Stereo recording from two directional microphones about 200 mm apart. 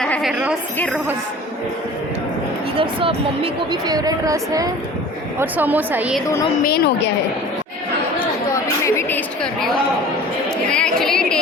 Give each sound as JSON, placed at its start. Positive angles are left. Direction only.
{"t": 0.0, "sound": "a woman's voice", "side_deg": 0}
{"t": 2.7, "sound": "a woman's voice", "side_deg": -25}
{"t": 6.7, "sound": "a woman's voice", "side_deg": 50}
{"t": 8.8, "sound": "a woman's voice", "side_deg": 10}